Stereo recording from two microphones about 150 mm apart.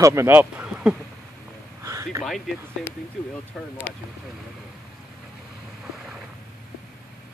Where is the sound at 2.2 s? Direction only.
Centre (ahead or behind).